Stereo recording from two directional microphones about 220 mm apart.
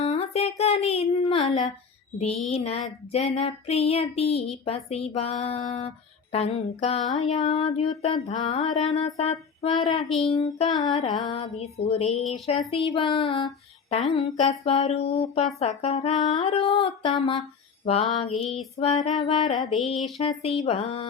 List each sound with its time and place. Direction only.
0.0 s female singing: 25° left (ahead or behind)
2.5 s child singing: 30° left (ahead or behind)